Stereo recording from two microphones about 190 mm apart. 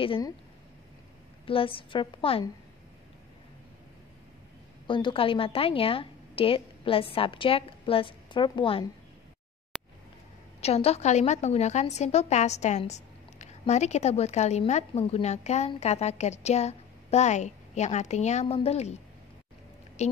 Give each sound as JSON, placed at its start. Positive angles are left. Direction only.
{"t": 0.0, "sound": "a woman's voice", "side_deg": 25}
{"t": 1.4, "sound": "a woman's voice", "side_deg": 30}
{"t": 4.8, "sound": "a woman's voice", "side_deg": 25}
{"t": 10.6, "sound": "a woman's voice", "side_deg": 35}
{"t": 20.0, "sound": "a woman's voice", "side_deg": 35}